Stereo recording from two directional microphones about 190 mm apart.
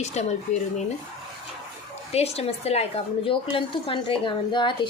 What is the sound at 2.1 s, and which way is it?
A woman's voice, 35° left (ahead or behind).